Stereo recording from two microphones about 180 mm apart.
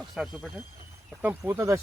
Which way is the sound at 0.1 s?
Centre (ahead or behind).